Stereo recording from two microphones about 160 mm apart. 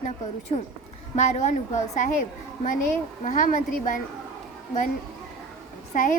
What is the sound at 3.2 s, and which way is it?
Speech, 55° left (ahead or behind).